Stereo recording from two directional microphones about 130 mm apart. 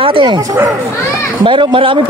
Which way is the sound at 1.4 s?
40° right (ahead or behind).